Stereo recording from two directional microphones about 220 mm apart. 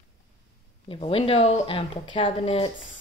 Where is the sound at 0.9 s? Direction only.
25° left (ahead or behind).